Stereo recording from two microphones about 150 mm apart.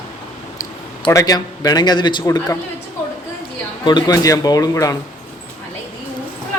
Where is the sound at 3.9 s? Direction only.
30° left (ahead or behind).